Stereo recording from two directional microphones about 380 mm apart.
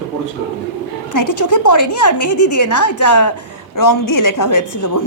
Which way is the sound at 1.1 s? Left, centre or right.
Left.